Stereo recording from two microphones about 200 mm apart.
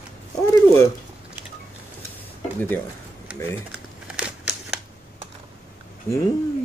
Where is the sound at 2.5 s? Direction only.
10° left (ahead or behind).